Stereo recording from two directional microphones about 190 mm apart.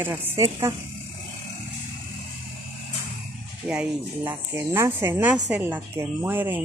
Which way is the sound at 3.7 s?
5° right (ahead or behind).